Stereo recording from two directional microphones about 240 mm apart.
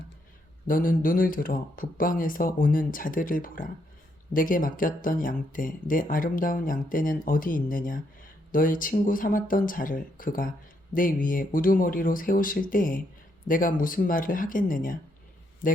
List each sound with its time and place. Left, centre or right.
0.7 s a man's voice: left